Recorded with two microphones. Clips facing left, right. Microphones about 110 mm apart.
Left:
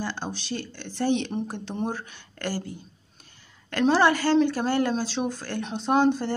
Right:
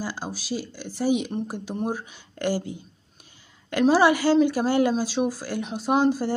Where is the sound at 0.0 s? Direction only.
10° right (ahead or behind).